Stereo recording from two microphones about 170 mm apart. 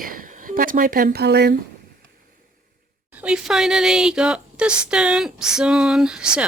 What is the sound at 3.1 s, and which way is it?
Speech, 5° right (ahead or behind).